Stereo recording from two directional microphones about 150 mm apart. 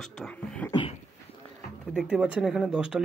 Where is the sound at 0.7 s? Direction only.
30° left (ahead or behind).